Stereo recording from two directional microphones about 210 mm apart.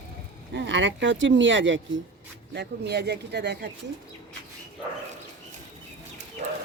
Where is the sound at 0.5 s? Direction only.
60° right (ahead or behind).